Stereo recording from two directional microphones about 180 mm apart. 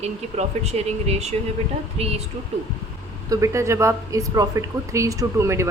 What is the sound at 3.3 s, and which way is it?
Speech, 15° right (ahead or behind).